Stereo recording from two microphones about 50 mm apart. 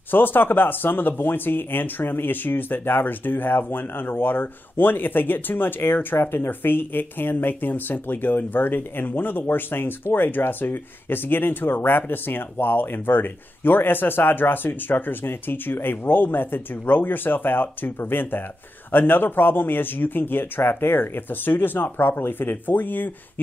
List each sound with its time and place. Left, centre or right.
0.1 s speech: left